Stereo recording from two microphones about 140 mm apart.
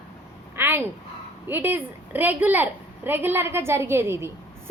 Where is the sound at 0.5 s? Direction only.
15° right (ahead or behind).